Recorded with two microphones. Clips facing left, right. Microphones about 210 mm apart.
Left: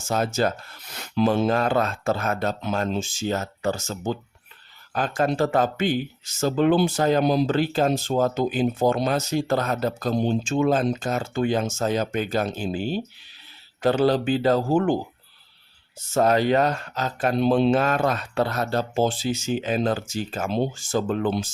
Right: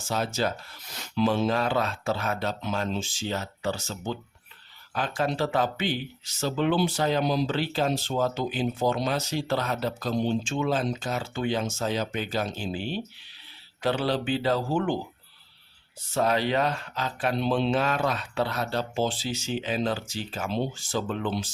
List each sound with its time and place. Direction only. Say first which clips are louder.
0.0 s speech: left 5 dB; 50° left (ahead or behind)
16.1 s speech: left 5 dB; 45° left (ahead or behind)